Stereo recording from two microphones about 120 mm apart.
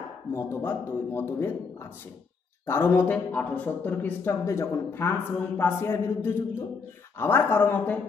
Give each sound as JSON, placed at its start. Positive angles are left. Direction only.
{"t": 0.3, "sound": "a man's voice", "side_deg": 20}
{"t": 2.6, "sound": "a man's voice", "side_deg": 20}